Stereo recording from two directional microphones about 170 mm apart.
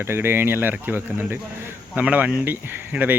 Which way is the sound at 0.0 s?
15° right (ahead or behind).